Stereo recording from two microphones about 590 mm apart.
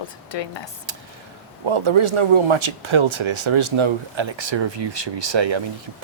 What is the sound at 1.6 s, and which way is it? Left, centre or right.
Speech, right.